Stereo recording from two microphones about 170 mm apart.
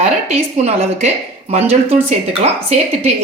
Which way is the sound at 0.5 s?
40° right (ahead or behind).